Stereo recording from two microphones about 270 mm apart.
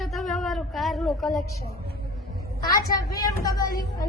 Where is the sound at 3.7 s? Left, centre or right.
Left.